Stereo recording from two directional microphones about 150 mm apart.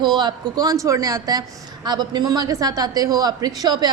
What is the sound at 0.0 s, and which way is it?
A woman's voice, 30° right (ahead or behind).